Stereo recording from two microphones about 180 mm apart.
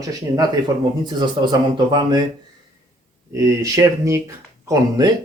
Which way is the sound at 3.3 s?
20° right (ahead or behind).